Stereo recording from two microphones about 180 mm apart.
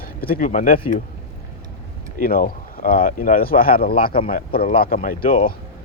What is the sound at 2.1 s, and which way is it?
Speech, 50° left (ahead or behind).